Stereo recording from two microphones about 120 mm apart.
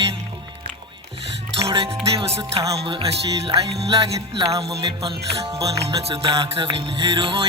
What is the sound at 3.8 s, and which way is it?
Speech, 55° right (ahead or behind).